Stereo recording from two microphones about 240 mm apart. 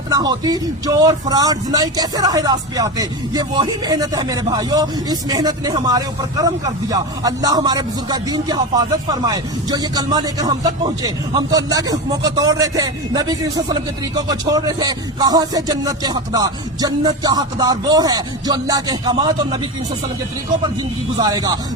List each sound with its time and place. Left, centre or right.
0.1 s speech: centre
21.2 s speech: centre